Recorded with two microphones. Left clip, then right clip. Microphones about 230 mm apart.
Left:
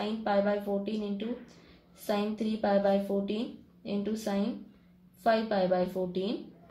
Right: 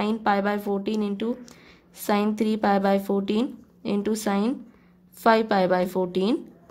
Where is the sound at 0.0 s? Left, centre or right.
Right.